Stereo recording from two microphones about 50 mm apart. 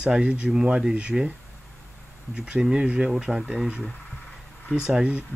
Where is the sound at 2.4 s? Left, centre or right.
Centre.